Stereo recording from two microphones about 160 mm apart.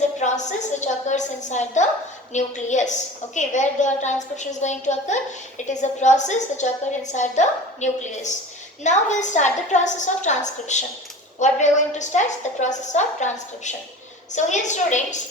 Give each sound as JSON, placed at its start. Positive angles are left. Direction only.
{"t": 0.2, "sound": "a woman's voice", "side_deg": 50}